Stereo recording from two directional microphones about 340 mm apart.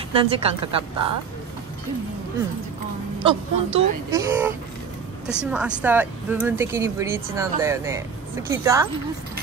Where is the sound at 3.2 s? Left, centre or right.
Centre.